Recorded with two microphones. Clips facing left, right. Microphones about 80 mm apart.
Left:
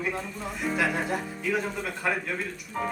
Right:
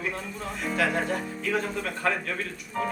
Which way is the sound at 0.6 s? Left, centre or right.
Centre.